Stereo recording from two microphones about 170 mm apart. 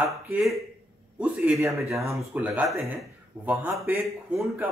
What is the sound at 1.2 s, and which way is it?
A man's voice, 10° right (ahead or behind).